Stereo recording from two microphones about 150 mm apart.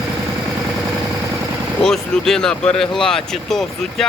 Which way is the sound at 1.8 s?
5° left (ahead or behind).